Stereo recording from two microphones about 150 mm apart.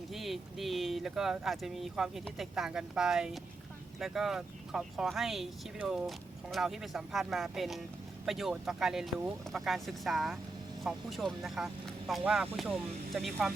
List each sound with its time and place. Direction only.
0.1 s speech: centre (ahead or behind)